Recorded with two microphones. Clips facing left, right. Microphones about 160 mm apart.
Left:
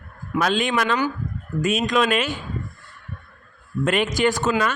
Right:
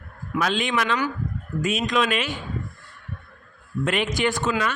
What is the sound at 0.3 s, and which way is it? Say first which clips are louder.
Speech: left 3 dB; 45° left (ahead or behind).